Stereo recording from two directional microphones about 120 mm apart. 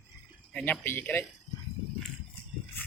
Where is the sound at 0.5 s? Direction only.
15° left (ahead or behind).